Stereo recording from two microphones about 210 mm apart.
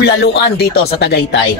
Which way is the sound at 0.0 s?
55° left (ahead or behind).